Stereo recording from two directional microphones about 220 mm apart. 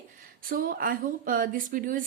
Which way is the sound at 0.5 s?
40° right (ahead or behind).